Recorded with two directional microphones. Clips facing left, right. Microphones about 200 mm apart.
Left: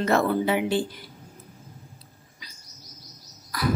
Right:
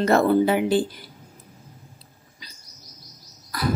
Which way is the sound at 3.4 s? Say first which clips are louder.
Right 1 dB; 35° right (ahead or behind).